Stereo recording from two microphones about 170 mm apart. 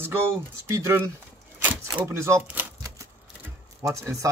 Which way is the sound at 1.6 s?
10° right (ahead or behind).